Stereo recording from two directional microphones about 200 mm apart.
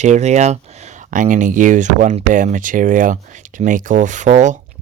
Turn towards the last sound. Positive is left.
turn(degrees=-35)  # may be behind; listen again after turning